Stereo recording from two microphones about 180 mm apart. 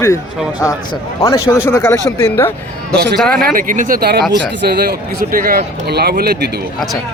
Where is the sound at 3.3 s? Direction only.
50° right (ahead or behind).